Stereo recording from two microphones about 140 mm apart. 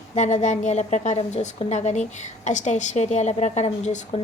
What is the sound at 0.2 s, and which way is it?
A woman's voice, 60° left (ahead or behind).